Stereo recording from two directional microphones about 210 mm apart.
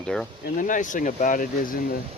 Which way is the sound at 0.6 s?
40° left (ahead or behind).